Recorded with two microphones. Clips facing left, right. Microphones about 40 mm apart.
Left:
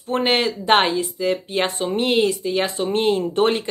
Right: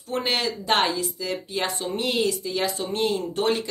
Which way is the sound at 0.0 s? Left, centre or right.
Left.